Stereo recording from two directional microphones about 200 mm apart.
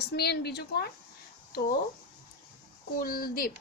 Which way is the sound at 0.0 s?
55° left (ahead or behind).